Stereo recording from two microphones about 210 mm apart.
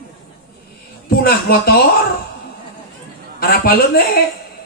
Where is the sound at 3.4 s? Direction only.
45° left (ahead or behind).